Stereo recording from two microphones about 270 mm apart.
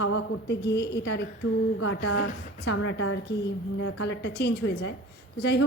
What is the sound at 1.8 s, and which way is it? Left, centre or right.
A woman's voice, left.